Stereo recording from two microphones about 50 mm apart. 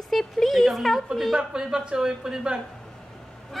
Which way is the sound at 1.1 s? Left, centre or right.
Centre.